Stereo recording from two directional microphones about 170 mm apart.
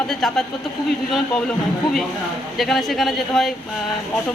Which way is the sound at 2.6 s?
Centre (ahead or behind).